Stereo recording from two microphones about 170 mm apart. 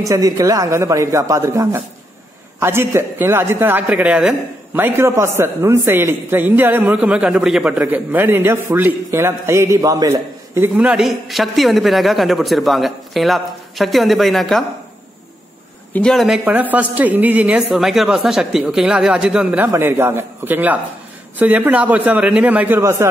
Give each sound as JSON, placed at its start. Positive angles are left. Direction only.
{"t": 0.0, "sound": "a man's voice", "side_deg": -20}
{"t": 15.9, "sound": "a man's voice", "side_deg": 5}